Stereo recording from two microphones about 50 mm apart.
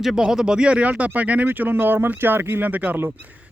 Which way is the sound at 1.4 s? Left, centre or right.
Right.